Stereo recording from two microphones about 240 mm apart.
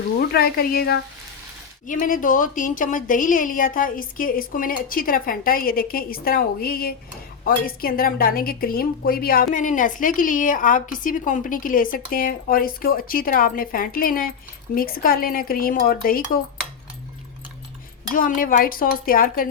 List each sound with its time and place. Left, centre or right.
0.2 s a woman's voice: left
18.1 s a woman's voice: left